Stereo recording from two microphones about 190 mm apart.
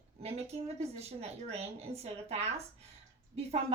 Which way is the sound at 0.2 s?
35° right (ahead or behind).